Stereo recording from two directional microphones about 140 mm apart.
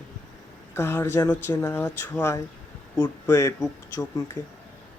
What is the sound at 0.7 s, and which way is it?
Speech, 15° left (ahead or behind).